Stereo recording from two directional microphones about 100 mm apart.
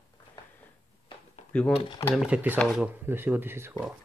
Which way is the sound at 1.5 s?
10° left (ahead or behind).